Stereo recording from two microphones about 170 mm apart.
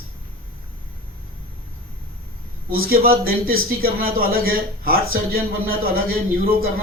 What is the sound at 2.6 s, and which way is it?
A man's voice, 60° right (ahead or behind).